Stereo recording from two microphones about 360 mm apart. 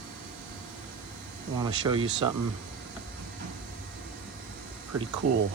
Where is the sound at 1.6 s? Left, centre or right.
Centre.